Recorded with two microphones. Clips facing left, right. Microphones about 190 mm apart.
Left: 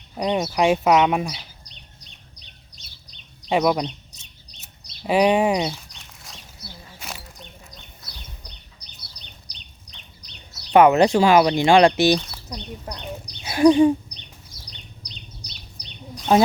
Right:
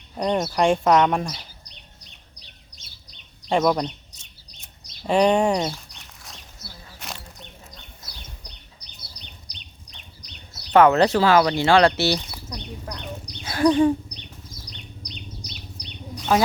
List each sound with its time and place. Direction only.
0.2 s speech: centre (ahead or behind)
3.5 s chirp: 5° left (ahead or behind)
6.3 s a sound: centre (ahead or behind)
10.7 s speech: 15° left (ahead or behind)
13.4 s bird: 15° left (ahead or behind)
13.7 s speech: 15° left (ahead or behind)